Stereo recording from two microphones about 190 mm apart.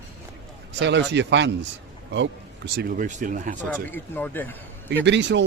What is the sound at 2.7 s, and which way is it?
Speech, 50° right (ahead or behind).